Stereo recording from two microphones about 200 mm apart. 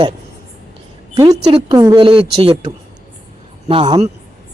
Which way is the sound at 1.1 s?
20° right (ahead or behind).